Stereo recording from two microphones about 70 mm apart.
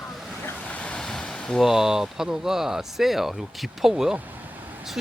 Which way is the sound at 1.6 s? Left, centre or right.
Centre.